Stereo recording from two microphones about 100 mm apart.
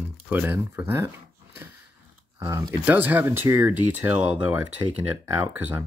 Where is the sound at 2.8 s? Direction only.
20° right (ahead or behind).